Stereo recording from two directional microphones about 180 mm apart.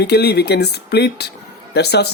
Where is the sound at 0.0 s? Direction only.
65° left (ahead or behind).